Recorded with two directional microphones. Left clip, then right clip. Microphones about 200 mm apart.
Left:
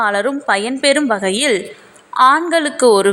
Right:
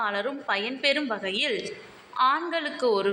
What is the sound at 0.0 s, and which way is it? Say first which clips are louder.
A woman's voice: left 12 dB; 50° left (ahead or behind).